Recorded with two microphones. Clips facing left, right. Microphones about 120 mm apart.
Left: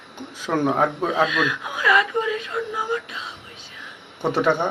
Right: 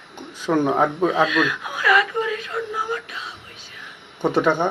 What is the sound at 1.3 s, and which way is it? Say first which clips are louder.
Whimper: right 2 dB; 20° left (ahead or behind).